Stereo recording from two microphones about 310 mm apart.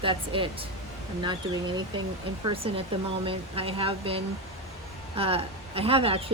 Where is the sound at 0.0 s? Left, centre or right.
Centre.